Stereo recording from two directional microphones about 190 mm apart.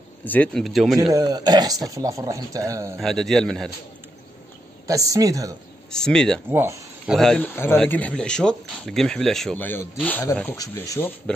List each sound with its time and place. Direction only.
0.2 s a man's voice: 10° left (ahead or behind)
1.1 s speech: 20° right (ahead or behind)
3.0 s a man's voice: centre (ahead or behind)
4.8 s speech: 15° right (ahead or behind)
5.9 s a man's voice: 5° left (ahead or behind)
6.5 s speech: 10° right (ahead or behind)
7.2 s speech: 5° left (ahead or behind)